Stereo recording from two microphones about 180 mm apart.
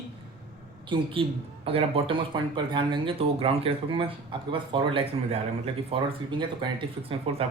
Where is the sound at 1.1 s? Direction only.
30° right (ahead or behind).